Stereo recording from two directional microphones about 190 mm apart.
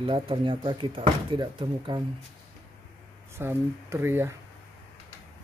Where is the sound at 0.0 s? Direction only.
30° right (ahead or behind).